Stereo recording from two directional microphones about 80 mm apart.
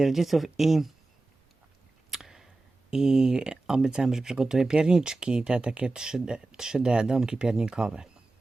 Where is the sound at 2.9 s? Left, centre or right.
Centre.